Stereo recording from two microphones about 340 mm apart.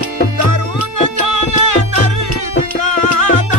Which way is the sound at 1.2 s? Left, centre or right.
Right.